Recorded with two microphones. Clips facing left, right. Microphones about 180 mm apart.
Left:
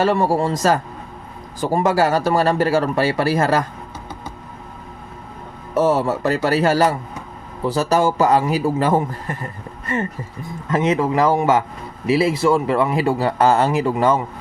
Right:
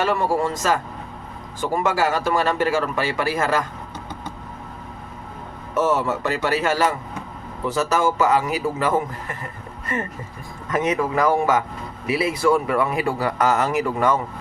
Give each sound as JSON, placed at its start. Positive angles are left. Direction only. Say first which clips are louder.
{"t": 0.0, "sound": "speech", "louder": "left 3 dB", "side_deg": 35}
{"t": 5.7, "sound": "speech", "louder": "left 3 dB", "side_deg": 35}
{"t": 10.7, "sound": "speech", "louder": "left 3 dB", "side_deg": 30}